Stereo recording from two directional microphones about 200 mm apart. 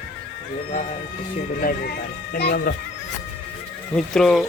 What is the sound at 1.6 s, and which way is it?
Speech, 45° left (ahead or behind).